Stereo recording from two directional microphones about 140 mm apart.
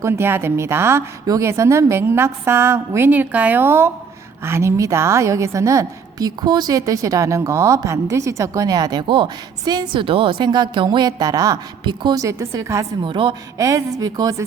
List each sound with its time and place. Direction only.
0.0 s a woman's voice: 15° right (ahead or behind)
13.0 s a woman's voice: 35° right (ahead or behind)
13.6 s a woman's voice: 25° right (ahead or behind)